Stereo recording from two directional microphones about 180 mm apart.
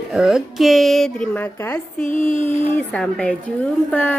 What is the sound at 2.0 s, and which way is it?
Speech, 45° left (ahead or behind).